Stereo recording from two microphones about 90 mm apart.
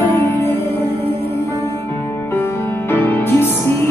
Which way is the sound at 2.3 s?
25° left (ahead or behind).